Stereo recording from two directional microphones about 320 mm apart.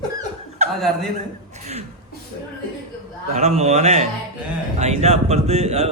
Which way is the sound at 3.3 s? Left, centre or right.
Centre.